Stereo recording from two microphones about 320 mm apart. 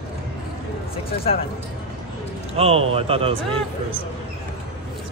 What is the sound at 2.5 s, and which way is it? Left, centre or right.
Speech, centre.